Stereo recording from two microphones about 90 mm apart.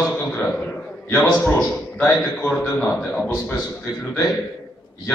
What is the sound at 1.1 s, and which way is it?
A man's voice, 20° left (ahead or behind).